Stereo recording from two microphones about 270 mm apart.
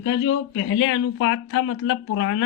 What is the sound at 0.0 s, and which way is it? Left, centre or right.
Speech, left.